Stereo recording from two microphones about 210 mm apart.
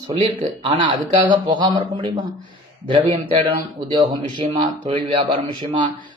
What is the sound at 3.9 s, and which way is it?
Speech, 20° right (ahead or behind).